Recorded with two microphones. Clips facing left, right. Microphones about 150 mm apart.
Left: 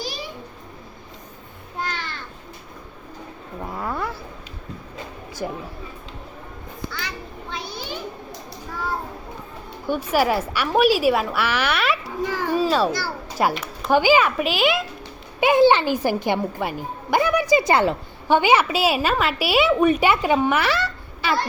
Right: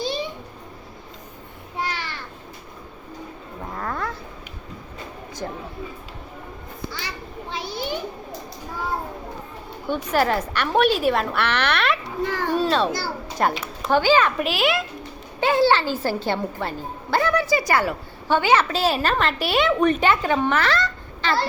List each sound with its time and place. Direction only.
0.0 s music: 25° right (ahead or behind)
1.8 s a sound: 5° right (ahead or behind)
3.7 s cat: 10° left (ahead or behind)
5.4 s speech: 10° left (ahead or behind)
7.5 s a sound: 25° right (ahead or behind)
9.9 s a woman's voice: 10° left (ahead or behind)
12.2 s a sound: 10° left (ahead or behind)
13.4 s speech: centre (ahead or behind)
13.9 s a woman's voice: 10° left (ahead or behind)
15.4 s speech: 15° left (ahead or behind)